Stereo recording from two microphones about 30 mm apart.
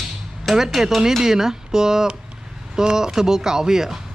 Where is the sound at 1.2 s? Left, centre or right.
Centre.